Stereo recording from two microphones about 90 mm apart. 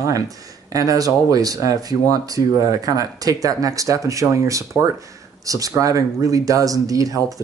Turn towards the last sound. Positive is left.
turn(degrees=-40)  # may be behind; listen again after turning